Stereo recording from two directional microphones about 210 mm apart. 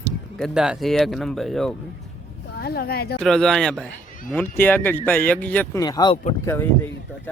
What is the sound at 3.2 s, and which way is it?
Speech, centre (ahead or behind).